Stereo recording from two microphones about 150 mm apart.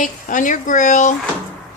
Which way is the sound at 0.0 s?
60° left (ahead or behind).